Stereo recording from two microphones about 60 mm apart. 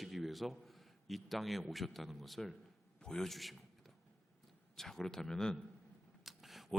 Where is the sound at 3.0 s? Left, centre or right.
Centre.